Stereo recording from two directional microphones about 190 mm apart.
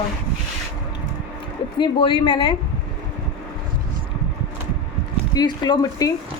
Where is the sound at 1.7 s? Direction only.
25° left (ahead or behind).